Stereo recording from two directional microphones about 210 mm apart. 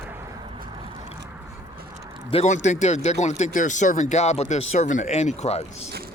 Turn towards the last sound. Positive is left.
turn(degrees=30)  # may be behind; listen again after turning